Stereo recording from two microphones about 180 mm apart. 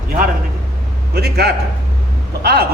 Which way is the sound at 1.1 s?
60° right (ahead or behind).